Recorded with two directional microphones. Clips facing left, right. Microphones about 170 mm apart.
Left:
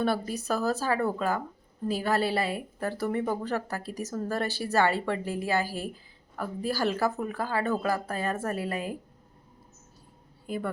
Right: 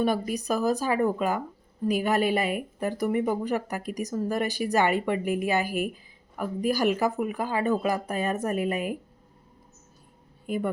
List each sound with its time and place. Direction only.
0.0 s speech: 15° right (ahead or behind)
10.4 s speech: 20° right (ahead or behind)